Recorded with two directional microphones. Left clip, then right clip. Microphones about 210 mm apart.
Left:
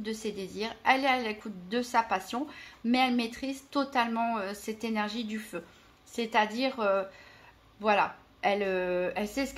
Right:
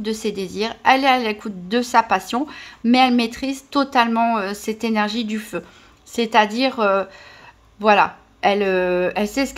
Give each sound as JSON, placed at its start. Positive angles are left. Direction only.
{"t": 0.0, "sound": "a woman's voice", "side_deg": -35}